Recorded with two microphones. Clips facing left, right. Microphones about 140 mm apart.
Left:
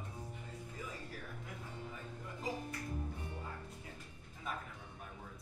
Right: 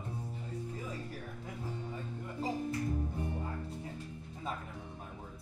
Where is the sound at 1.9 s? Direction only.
30° right (ahead or behind).